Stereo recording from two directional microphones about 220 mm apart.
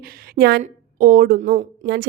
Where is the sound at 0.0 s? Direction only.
40° right (ahead or behind).